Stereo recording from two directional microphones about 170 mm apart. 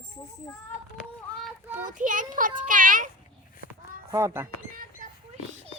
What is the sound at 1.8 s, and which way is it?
A child's voice, 50° right (ahead or behind).